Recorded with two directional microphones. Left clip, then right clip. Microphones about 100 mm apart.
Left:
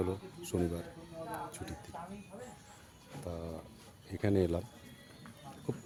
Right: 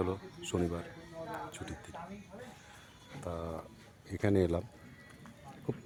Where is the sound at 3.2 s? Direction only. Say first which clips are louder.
Right 3 dB; 5° right (ahead or behind).